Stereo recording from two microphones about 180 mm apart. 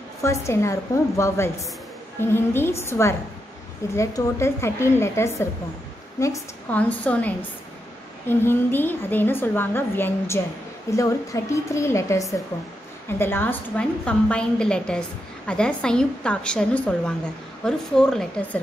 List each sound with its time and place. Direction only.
0.2 s a woman's voice: 15° left (ahead or behind)